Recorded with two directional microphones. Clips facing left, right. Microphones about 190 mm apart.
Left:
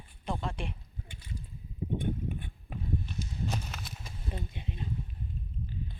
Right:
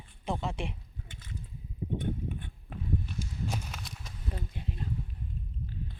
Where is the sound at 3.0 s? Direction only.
Centre (ahead or behind).